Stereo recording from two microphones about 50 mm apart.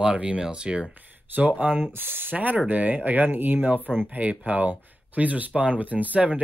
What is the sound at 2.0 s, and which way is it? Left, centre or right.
Speech, right.